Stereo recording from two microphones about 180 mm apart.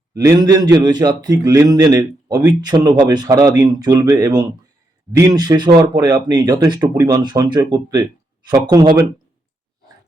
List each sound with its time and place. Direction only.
0.2 s a man's voice: 20° right (ahead or behind)